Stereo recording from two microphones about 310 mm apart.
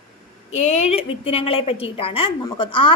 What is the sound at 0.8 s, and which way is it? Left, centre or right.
A woman's voice, centre.